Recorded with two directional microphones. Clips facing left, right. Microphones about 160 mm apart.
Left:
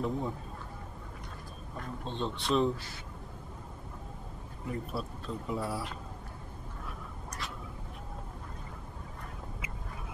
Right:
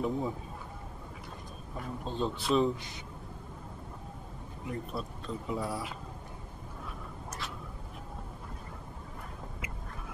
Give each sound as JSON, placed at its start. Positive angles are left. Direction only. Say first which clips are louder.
{"t": 0.0, "sound": "speech", "louder": "right 1 dB", "side_deg": 0}
{"t": 1.8, "sound": "speech", "louder": "right 2 dB", "side_deg": -5}
{"t": 2.7, "sound": "speech", "louder": "even", "side_deg": -20}
{"t": 4.6, "sound": "speech", "louder": "left 1 dB", "side_deg": 0}